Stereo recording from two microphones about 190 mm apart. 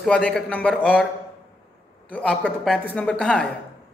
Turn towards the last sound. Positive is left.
turn(degrees=5)  # may be behind; listen again after turning